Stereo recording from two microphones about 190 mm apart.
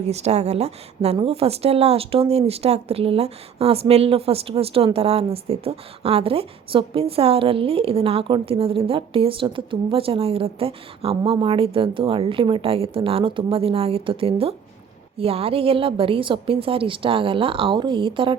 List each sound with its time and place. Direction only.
0.1 s a woman's voice: 35° right (ahead or behind)